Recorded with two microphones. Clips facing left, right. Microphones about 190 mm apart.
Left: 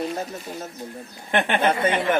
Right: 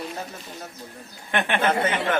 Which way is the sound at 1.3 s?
30° left (ahead or behind).